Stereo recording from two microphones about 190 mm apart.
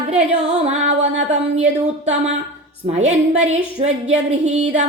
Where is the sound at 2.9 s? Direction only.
35° right (ahead or behind).